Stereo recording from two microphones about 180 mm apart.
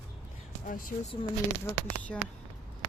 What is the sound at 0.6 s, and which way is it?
Speech, 50° left (ahead or behind).